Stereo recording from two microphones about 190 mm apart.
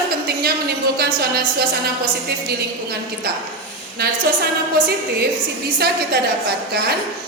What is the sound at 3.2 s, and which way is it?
Speech, 55° right (ahead or behind).